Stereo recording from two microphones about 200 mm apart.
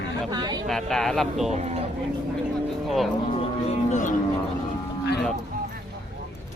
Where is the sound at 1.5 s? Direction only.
35° right (ahead or behind).